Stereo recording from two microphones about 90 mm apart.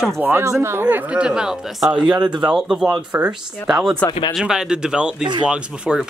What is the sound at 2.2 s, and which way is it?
Speech, 55° right (ahead or behind).